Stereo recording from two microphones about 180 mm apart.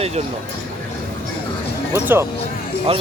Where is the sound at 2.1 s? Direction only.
10° right (ahead or behind).